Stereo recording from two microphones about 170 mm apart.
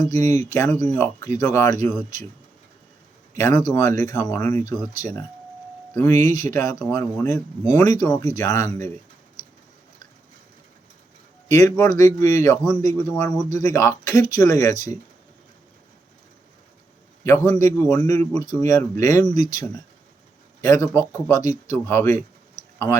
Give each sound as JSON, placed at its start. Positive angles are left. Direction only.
{"t": 0.1, "sound": "speech", "side_deg": 20}
{"t": 3.3, "sound": "speech", "side_deg": 20}
{"t": 11.4, "sound": "speech", "side_deg": 20}
{"t": 17.2, "sound": "a man's voice", "side_deg": 15}